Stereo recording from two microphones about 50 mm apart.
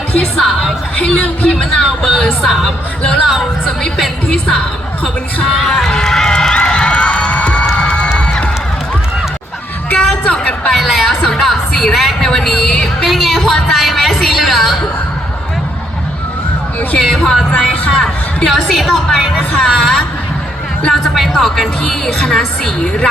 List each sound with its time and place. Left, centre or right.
0.3 s music: centre
1.0 s music: centre
2.1 s speech: centre
3.0 s speech: centre
4.3 s a woman's voice: centre
5.5 s crowd: centre; by 7.7 s left
10.2 s a sound: left
10.7 s a sound: centre
11.3 s music: centre
11.8 s a sound: centre
13.1 s a sound: centre
17.0 s a woman's voice: centre